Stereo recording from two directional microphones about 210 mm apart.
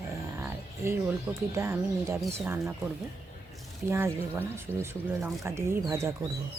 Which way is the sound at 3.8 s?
10° right (ahead or behind).